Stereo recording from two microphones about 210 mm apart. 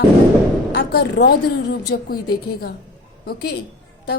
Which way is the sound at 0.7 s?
50° left (ahead or behind).